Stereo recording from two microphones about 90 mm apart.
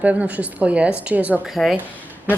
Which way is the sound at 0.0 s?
15° right (ahead or behind).